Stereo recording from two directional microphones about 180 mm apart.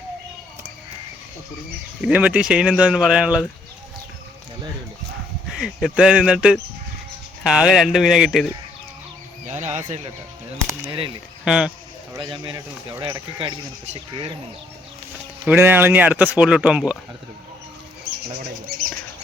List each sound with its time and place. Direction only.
2.0 s speech: 5° right (ahead or behind)
5.5 s speech: centre (ahead or behind)
9.5 s speech: 40° right (ahead or behind)
10.8 s speech: 25° right (ahead or behind)
11.4 s speech: 5° right (ahead or behind)
12.1 s speech: 25° right (ahead or behind)
15.4 s speech: 10° right (ahead or behind)
18.0 s a sound: 60° right (ahead or behind)